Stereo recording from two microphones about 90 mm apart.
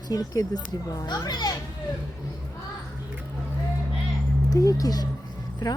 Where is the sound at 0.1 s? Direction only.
45° left (ahead or behind).